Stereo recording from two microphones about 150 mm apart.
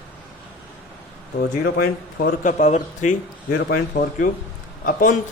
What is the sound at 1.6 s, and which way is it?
Speech, 90° left.